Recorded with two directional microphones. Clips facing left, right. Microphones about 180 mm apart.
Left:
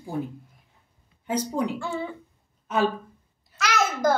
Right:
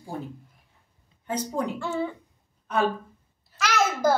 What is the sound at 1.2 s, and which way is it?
Speech, 10° left (ahead or behind).